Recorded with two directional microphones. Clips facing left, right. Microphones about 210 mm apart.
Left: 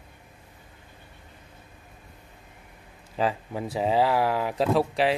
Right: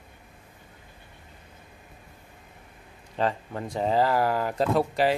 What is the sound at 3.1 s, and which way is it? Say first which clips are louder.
Speech: left 1 dB; 5° left (ahead or behind).